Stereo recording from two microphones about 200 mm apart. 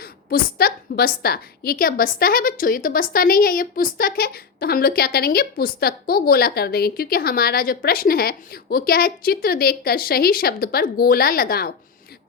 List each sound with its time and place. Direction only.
0.0 s a woman's voice: 50° left (ahead or behind)